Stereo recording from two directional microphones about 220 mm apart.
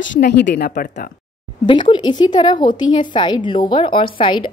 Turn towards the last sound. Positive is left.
turn(degrees=20)  # may be behind; listen again after turning